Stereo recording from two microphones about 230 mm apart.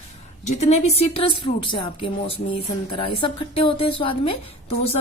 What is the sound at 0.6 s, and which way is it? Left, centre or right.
A woman's voice, left.